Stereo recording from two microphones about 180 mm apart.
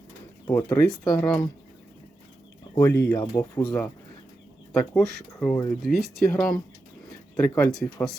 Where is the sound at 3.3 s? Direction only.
25° left (ahead or behind).